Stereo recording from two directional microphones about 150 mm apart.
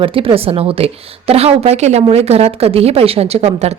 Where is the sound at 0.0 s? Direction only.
35° right (ahead or behind).